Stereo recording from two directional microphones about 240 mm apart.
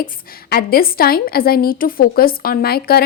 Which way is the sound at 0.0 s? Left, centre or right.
Left.